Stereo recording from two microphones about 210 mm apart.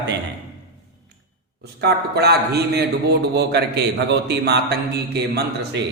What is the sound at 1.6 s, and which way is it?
A man's voice, 50° right (ahead or behind).